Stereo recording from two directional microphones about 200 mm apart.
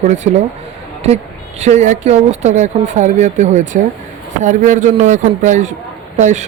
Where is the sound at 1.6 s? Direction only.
35° right (ahead or behind).